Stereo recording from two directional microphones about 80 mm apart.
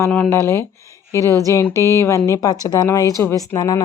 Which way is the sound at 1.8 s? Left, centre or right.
Left.